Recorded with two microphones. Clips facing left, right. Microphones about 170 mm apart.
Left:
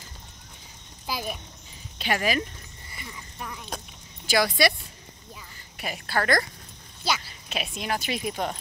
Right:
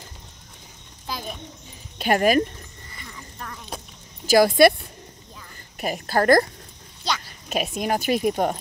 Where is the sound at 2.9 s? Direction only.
10° left (ahead or behind).